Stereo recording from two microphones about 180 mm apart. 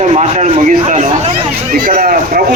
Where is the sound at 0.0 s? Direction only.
40° right (ahead or behind).